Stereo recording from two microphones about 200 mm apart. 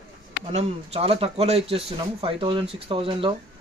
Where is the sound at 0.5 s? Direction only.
30° right (ahead or behind).